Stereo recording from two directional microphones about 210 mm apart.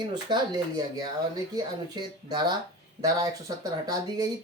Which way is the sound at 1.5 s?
20° right (ahead or behind).